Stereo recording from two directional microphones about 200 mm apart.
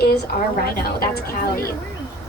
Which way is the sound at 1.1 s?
50° left (ahead or behind).